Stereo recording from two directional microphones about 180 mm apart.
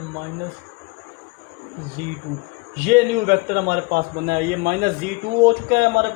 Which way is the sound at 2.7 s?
50° right (ahead or behind).